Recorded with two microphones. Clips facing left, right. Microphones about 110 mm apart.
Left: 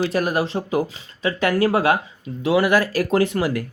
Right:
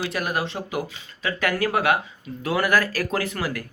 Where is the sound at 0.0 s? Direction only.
30° left (ahead or behind).